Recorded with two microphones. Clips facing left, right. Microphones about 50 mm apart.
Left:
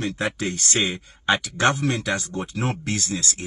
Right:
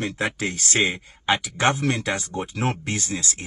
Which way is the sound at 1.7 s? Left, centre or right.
Right.